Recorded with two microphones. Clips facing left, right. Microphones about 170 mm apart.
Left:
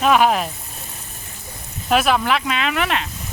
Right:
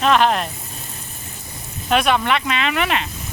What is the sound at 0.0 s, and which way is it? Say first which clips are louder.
Speech: left 1 dB; 5° left (ahead or behind).